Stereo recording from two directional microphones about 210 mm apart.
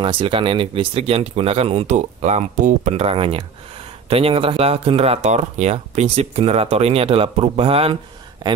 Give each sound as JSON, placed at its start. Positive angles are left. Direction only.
{"t": 0.0, "sound": "speech", "side_deg": -25}